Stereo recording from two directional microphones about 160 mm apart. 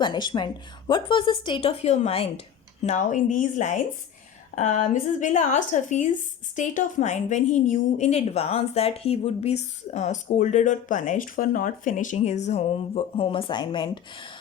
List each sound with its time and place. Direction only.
0.0 s a woman's voice: 30° left (ahead or behind)
2.8 s a woman's voice: 50° left (ahead or behind); by 14.3 s 30° left (ahead or behind)